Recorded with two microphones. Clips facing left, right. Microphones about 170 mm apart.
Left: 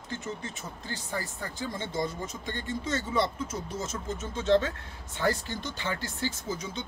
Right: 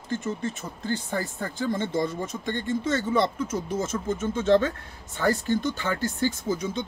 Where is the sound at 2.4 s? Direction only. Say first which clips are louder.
Right 7 dB; 55° right (ahead or behind).